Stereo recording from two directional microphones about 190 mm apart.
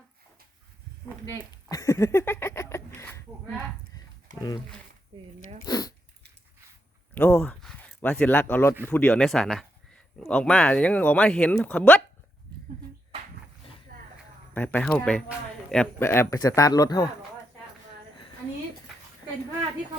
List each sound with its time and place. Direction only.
1.7 s a sound: 15° left (ahead or behind)
4.4 s speech: 20° left (ahead or behind)
5.6 s dog: 20° left (ahead or behind)
7.1 s speech: 10° left (ahead or behind)
13.9 s a sound: 50° right (ahead or behind)
14.5 s speech: 10° left (ahead or behind)